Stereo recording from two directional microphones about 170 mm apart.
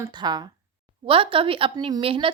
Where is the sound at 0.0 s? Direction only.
25° right (ahead or behind).